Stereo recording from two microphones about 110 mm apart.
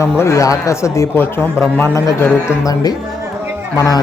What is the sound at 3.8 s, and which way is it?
Speech, 35° left (ahead or behind).